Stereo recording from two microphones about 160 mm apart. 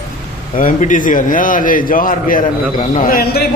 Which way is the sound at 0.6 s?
55° left (ahead or behind).